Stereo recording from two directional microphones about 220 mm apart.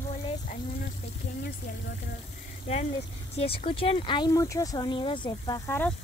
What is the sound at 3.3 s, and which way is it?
Speech, 25° left (ahead or behind).